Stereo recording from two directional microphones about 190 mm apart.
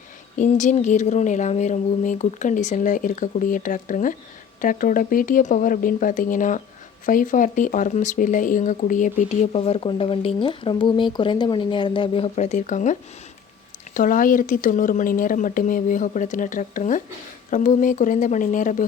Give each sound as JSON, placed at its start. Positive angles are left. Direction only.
{"t": 0.3, "sound": "speech", "side_deg": 40}
{"t": 9.5, "sound": "speech", "side_deg": 30}